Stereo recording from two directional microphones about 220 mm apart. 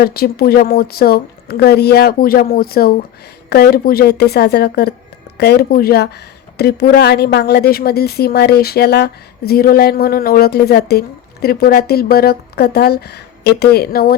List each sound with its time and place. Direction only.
0.0 s a woman's voice: 45° left (ahead or behind)